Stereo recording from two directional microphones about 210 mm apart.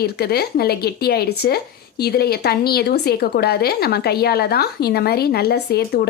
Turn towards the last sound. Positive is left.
turn(degrees=50)  # may be behind; listen again after turning